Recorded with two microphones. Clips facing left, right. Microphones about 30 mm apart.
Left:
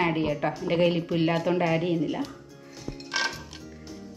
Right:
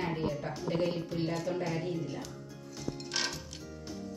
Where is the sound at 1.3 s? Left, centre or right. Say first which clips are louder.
Left 9 dB; left.